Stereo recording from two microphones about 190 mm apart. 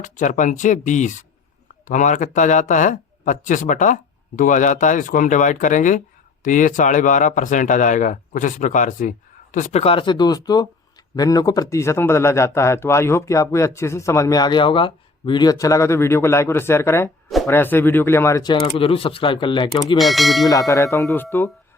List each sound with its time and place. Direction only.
0.0 s speech: 40° left (ahead or behind)
9.8 s speech: 25° left (ahead or behind)
17.2 s a sound: centre (ahead or behind)
17.5 s speech: 10° left (ahead or behind)
18.6 s speech: 30° left (ahead or behind)
20.0 s speech: centre (ahead or behind)
20.5 s speech: 15° left (ahead or behind)